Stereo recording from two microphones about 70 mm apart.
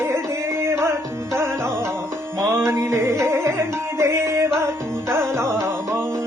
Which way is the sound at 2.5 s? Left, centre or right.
Right.